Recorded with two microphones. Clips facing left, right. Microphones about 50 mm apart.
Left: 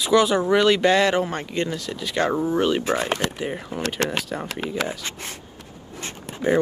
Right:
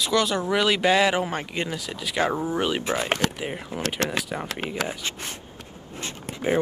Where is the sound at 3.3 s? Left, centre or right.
Centre.